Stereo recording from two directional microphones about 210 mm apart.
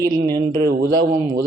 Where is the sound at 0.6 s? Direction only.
45° right (ahead or behind).